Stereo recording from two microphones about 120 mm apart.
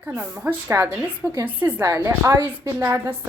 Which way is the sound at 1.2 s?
5° right (ahead or behind).